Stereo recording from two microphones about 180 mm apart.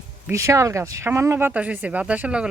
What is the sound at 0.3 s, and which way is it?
Speech, 15° right (ahead or behind).